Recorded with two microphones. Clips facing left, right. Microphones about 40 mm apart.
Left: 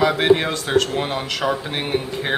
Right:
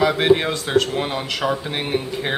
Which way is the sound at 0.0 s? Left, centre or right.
Centre.